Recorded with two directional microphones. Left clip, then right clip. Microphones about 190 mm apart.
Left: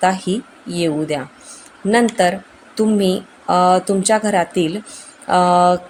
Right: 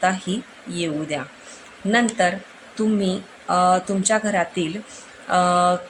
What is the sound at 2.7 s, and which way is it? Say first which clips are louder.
Speech: left 6 dB; 35° left (ahead or behind).